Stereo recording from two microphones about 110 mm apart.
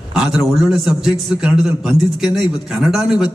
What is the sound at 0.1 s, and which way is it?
A man's voice, 5° right (ahead or behind).